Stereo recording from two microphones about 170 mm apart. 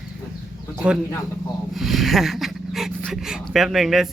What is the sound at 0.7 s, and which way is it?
Speech, 5° right (ahead or behind).